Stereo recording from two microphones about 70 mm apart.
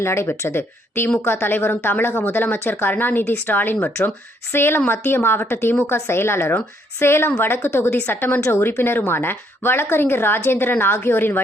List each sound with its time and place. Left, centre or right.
0.0 s a woman's voice: left